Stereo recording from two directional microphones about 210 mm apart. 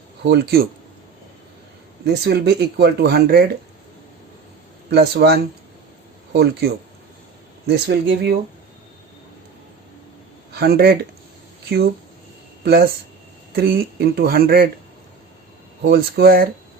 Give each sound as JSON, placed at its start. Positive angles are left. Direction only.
{"t": 0.2, "sound": "speech", "side_deg": -50}
{"t": 2.0, "sound": "speech", "side_deg": -50}
{"t": 4.9, "sound": "speech", "side_deg": -50}
{"t": 7.7, "sound": "speech", "side_deg": -50}
{"t": 10.5, "sound": "speech", "side_deg": -50}
{"t": 12.6, "sound": "speech", "side_deg": -45}
{"t": 15.8, "sound": "speech", "side_deg": -50}